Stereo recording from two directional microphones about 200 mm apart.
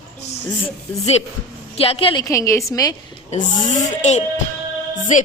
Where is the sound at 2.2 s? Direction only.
15° left (ahead or behind).